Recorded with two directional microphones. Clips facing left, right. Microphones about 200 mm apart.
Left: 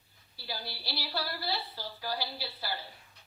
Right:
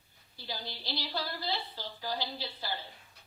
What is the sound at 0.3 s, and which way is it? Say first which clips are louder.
A woman's voice: even; 20° right (ahead or behind).